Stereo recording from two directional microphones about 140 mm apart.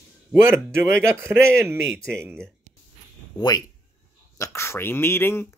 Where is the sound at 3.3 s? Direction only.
30° left (ahead or behind).